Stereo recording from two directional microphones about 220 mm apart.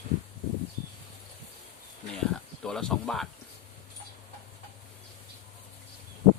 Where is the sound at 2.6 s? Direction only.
5° left (ahead or behind).